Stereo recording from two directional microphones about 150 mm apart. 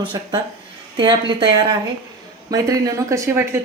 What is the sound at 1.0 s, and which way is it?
A woman's voice, 30° right (ahead or behind).